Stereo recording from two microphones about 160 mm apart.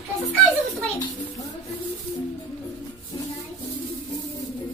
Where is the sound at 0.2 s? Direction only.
5° left (ahead or behind).